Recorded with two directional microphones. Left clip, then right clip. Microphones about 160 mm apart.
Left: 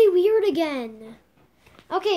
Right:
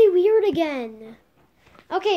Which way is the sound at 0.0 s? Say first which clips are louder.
Right 1 dB; 35° left (ahead or behind).